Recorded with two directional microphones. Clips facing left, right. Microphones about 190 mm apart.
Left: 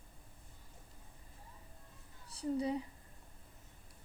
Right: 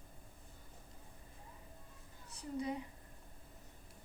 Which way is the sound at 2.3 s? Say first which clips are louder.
Left 5 dB; 35° left (ahead or behind).